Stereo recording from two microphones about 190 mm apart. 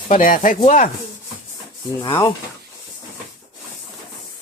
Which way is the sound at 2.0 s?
20° left (ahead or behind).